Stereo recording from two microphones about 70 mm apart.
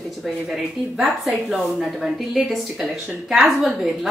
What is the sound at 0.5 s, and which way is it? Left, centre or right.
Speech, centre.